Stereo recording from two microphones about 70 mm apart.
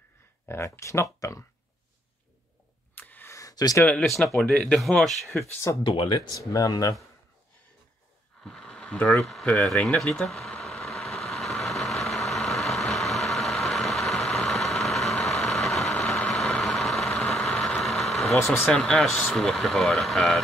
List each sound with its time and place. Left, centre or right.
0.7 s speech: left
2.9 s a sound: left
3.3 s a sound: left
4.0 s speech: centre
5.0 s speech: centre
5.7 s speech: left
6.0 s speech: left
6.3 s speech: left
8.5 s a sound: centre
9.2 s speech: centre
10.6 s vehicle: centre
18.4 s speech: left
18.7 s speech: centre